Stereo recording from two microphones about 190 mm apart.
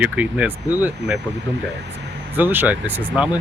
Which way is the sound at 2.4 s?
10° right (ahead or behind).